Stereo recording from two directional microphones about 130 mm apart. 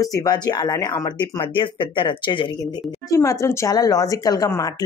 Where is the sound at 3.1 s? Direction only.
25° left (ahead or behind).